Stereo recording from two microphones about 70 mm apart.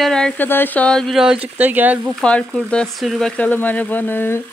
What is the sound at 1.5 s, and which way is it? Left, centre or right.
Speech, right.